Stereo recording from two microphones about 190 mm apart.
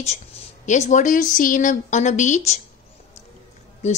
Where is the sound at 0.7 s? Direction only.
40° left (ahead or behind).